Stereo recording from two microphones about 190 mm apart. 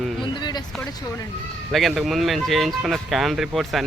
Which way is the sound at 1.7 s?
Centre (ahead or behind).